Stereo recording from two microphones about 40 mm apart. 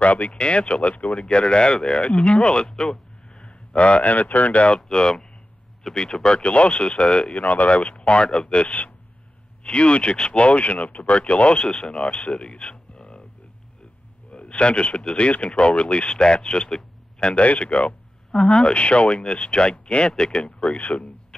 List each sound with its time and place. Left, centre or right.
0.0 s speech: left
1.2 s speech: left
14.3 s speech: left
18.3 s speech: centre